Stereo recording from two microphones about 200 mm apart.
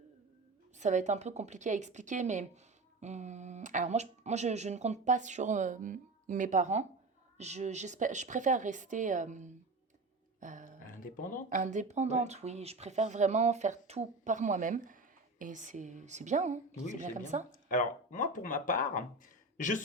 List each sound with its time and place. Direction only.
0.8 s speech: 35° right (ahead or behind)
10.8 s a sound: 45° left (ahead or behind)
11.5 s speech: 40° right (ahead or behind)
17.7 s speech: 40° left (ahead or behind)